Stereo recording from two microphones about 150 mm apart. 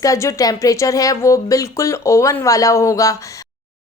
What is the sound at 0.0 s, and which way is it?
Speech, 20° left (ahead or behind).